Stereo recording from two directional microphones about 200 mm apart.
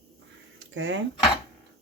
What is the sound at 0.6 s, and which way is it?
Speech, 70° right (ahead or behind).